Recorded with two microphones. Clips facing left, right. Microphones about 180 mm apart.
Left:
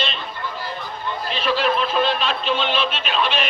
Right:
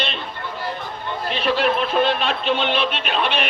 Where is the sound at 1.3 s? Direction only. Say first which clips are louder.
Right 1 dB; 60° right (ahead or behind).